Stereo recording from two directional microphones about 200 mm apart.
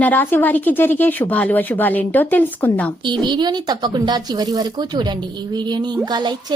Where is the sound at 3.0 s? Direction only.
25° right (ahead or behind).